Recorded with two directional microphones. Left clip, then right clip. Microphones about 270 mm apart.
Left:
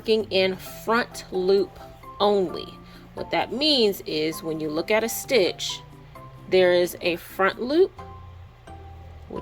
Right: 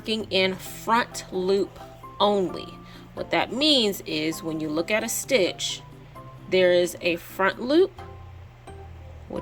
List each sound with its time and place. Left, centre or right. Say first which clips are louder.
0.0 s speech: left 3 dB; centre